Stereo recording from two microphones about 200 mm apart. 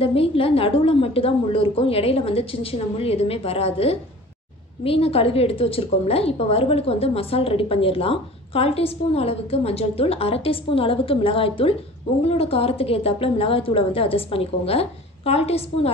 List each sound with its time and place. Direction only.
0.0 s a woman's voice: 30° left (ahead or behind)